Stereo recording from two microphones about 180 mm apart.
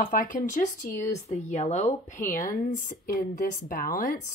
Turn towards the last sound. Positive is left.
turn(degrees=50)  # may be behind; listen again after turning